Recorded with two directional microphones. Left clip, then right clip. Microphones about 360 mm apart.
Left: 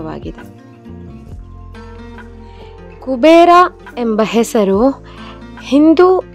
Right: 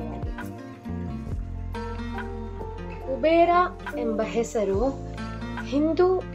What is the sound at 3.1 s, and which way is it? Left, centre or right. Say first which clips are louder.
A woman's voice: left 13 dB; left.